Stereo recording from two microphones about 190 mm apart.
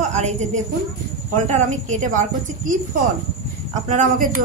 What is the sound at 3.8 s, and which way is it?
Speech, 40° right (ahead or behind).